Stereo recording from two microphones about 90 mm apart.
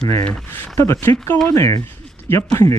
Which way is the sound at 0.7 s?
30° left (ahead or behind).